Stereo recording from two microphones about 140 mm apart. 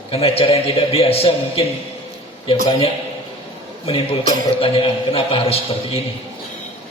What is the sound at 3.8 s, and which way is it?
A man's voice, 45° left (ahead or behind).